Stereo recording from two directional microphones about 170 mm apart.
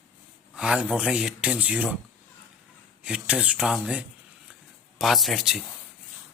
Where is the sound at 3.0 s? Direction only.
5° right (ahead or behind).